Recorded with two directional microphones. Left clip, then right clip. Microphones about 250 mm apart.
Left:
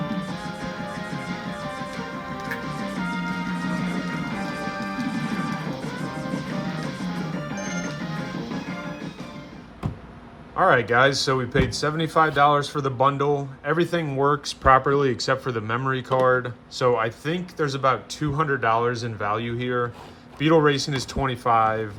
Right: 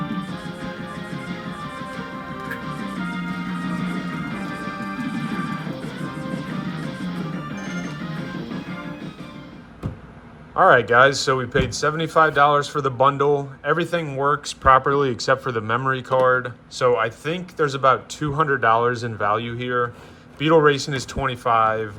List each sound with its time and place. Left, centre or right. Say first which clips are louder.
0.0 s music: even; centre
10.5 s speech: right 4 dB; centre